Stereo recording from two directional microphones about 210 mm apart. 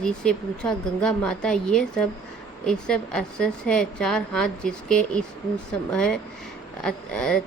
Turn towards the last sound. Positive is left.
turn(degrees=5)  # may be behind; listen again after turning